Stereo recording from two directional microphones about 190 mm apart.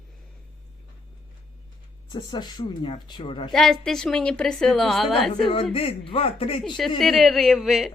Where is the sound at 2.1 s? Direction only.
20° left (ahead or behind).